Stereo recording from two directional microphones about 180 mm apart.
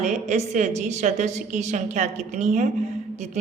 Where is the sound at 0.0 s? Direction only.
40° right (ahead or behind).